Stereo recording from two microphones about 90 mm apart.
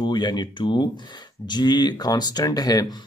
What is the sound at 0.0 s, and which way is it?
Speech, 55° left (ahead or behind).